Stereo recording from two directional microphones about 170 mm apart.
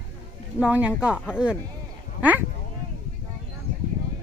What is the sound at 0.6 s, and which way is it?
Speech, 5° right (ahead or behind).